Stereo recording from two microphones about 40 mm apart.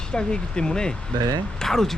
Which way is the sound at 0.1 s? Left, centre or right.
Centre.